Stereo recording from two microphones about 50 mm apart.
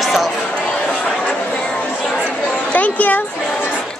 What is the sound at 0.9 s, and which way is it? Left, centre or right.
Chatter, left.